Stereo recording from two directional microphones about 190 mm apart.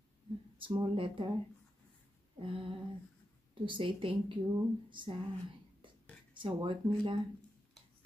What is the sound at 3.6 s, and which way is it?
Speech, 25° right (ahead or behind).